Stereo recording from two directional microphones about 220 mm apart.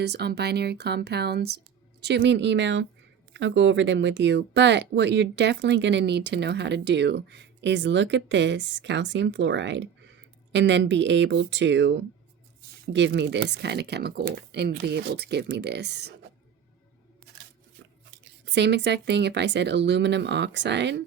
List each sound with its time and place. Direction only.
0.0 s speech: 50° right (ahead or behind)
18.4 s speech: 50° right (ahead or behind)